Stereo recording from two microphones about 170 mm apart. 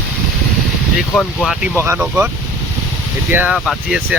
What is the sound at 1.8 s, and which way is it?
Speech, 15° right (ahead or behind).